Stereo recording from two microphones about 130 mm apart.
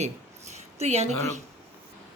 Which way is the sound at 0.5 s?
55° right (ahead or behind).